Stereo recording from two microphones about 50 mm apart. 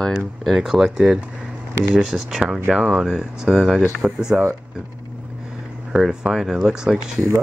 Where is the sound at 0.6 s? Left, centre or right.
Centre.